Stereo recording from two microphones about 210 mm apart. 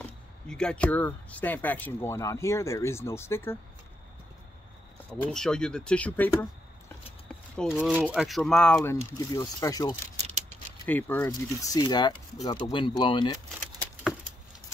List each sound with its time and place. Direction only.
0.0 s speech: 5° left (ahead or behind)
5.2 s speech: 5° left (ahead or behind)
7.5 s speech: centre (ahead or behind)
9.1 s speech: 15° left (ahead or behind)
11.7 s speech: 20° left (ahead or behind)